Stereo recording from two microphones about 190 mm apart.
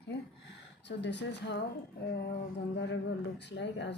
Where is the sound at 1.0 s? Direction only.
70° left (ahead or behind).